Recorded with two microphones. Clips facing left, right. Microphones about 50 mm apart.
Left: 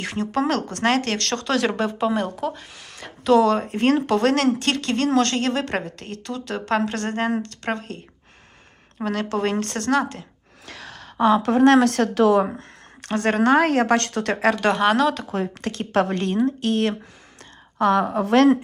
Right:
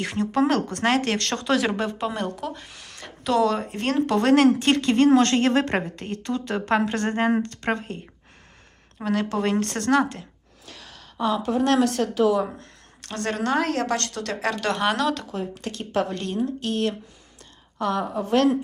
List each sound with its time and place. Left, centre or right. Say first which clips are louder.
0.0 s speech: right 1 dB; centre
5.3 s a woman's voice: right 3 dB; right
9.0 s speech: even; centre
10.7 s a sound: left 6 dB; left
11.8 s a woman's voice: left 3 dB; left
12.4 s a woman's voice: left 5 dB; left
14.8 s speech: left 4 dB; centre
15.3 s speech: left 4 dB; left
16.1 s a woman's voice: left 5 dB; left